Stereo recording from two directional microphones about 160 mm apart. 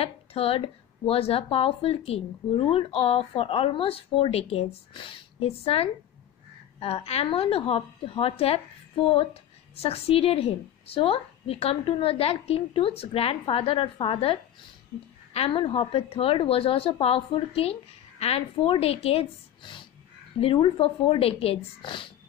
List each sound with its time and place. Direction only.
0.0 s speech: 35° left (ahead or behind)